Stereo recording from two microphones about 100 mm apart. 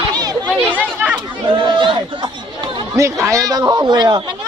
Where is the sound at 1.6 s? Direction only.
55° right (ahead or behind).